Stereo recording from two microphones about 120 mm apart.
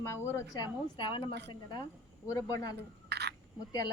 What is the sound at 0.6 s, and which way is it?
Speech, 45° left (ahead or behind).